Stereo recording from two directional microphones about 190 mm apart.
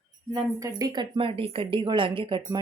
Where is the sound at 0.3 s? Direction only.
20° right (ahead or behind).